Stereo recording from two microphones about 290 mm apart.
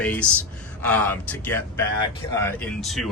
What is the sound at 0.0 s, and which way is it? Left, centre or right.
A man's voice, centre.